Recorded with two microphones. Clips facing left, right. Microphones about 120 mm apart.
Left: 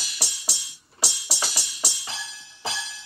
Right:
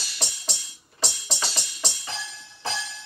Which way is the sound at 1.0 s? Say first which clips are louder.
Right 1 dB; 10° left (ahead or behind).